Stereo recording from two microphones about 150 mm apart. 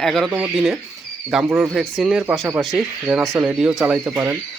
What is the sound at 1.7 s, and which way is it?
Speech, centre (ahead or behind).